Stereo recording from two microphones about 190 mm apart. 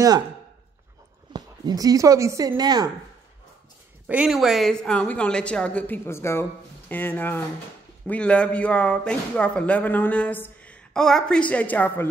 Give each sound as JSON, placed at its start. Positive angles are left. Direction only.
{"t": 1.3, "sound": "speech", "side_deg": -20}
{"t": 4.1, "sound": "a woman's voice", "side_deg": -5}